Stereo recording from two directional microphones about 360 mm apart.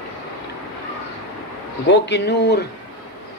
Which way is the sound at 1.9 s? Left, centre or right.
Left.